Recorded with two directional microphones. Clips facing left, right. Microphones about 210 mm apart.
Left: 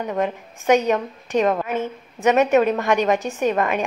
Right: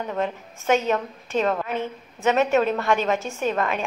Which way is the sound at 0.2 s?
15° left (ahead or behind).